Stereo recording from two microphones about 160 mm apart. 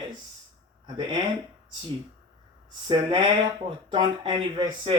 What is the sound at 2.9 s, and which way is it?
Speech, 35° right (ahead or behind).